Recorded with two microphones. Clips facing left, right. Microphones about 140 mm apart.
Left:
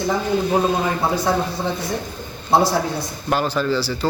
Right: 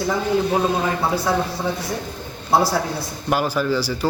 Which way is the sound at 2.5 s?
20° left (ahead or behind).